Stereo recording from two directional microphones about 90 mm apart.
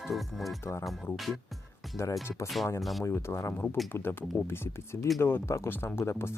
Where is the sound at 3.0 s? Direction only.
30° left (ahead or behind).